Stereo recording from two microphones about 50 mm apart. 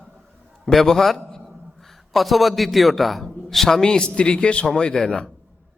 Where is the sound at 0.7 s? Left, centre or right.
Centre.